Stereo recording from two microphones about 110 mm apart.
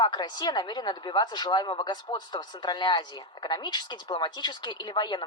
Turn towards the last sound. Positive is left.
turn(degrees=45)  # may be behind; listen again after turning